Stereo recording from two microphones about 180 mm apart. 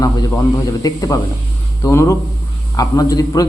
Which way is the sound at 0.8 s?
20° left (ahead or behind).